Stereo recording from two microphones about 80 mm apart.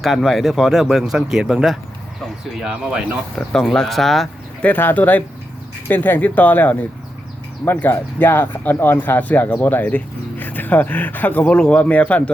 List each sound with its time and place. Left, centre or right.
0.0 s speech: centre
3.3 s speech: centre
4.6 s speech: left